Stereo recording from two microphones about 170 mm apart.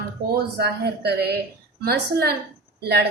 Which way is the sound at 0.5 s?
75° right (ahead or behind).